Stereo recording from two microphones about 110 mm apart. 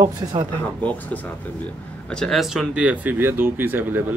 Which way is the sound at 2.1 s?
Centre (ahead or behind).